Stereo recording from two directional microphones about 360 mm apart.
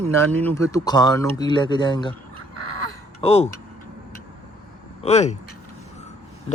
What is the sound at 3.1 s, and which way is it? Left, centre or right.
Speech, centre.